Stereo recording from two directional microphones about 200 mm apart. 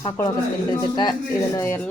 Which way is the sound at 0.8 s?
20° left (ahead or behind).